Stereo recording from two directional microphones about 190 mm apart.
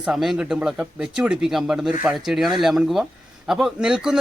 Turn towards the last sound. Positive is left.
turn(degrees=-5)  # may be behind; listen again after turning